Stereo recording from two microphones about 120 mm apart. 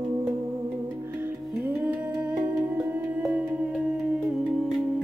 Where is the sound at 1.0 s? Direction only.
20° right (ahead or behind).